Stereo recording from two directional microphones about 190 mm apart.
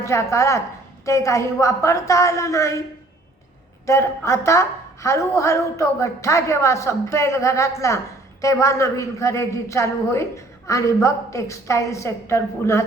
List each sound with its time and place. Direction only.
0.0 s a man's voice: 15° left (ahead or behind)
3.8 s a man's voice: 15° left (ahead or behind)